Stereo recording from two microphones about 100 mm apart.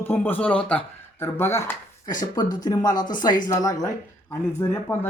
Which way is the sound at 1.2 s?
25° left (ahead or behind).